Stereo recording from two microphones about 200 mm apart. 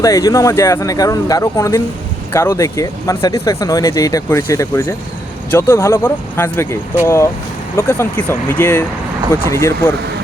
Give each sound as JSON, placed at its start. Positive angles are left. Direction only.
{"t": 0.0, "sound": "speech", "side_deg": 15}